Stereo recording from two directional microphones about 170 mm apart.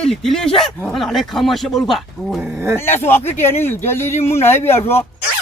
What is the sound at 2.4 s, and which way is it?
Speech, 10° right (ahead or behind).